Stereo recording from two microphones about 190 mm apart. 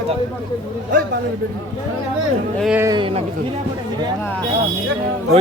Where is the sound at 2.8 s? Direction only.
25° right (ahead or behind).